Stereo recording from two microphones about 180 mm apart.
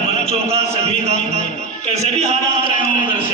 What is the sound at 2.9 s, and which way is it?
Speech, 50° left (ahead or behind).